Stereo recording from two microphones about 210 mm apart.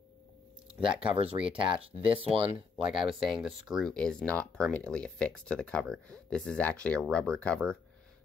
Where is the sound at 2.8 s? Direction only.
Centre (ahead or behind).